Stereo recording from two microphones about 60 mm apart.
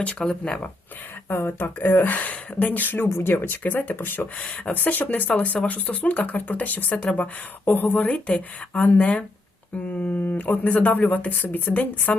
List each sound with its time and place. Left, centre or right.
0.0 s speech: centre
1.3 s speech: left
3.9 s speech: left
4.4 s speech: centre
4.7 s speech: left
7.9 s speech: centre